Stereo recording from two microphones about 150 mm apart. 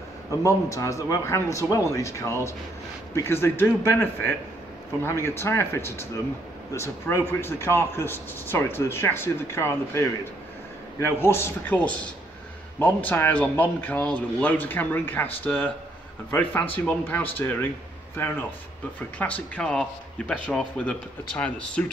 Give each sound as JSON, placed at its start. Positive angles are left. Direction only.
{"t": 0.3, "sound": "a man's voice", "side_deg": 20}